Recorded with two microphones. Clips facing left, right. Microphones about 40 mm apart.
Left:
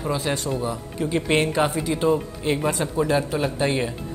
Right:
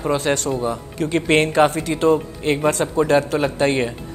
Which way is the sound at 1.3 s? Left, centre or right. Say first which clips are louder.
Right 6 dB; right.